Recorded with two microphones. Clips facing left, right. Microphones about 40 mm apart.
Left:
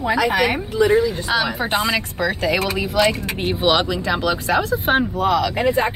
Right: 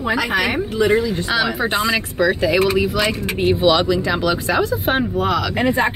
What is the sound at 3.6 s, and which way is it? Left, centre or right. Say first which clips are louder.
Speech: right 1 dB; left.